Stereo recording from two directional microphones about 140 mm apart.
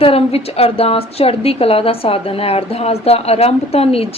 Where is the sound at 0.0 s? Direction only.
45° left (ahead or behind).